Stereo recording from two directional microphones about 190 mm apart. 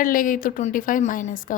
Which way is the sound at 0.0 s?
45° left (ahead or behind).